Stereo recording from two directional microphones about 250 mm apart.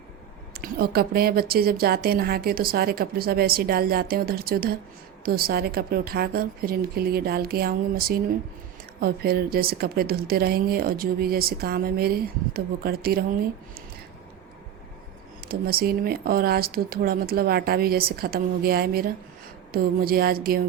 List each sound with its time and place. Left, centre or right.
0.5 s a woman's voice: right
15.4 s a woman's voice: right